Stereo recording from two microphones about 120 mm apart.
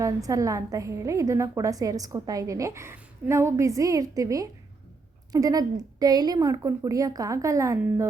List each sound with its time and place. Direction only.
0.0 s a woman's voice: 30° right (ahead or behind)